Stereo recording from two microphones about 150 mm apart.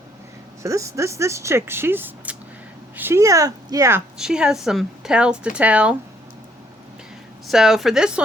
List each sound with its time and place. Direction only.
0.6 s speech: 20° right (ahead or behind)
4.2 s speech: 5° right (ahead or behind)
7.4 s speech: centre (ahead or behind)